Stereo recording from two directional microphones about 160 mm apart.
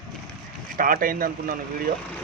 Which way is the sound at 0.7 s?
60° right (ahead or behind).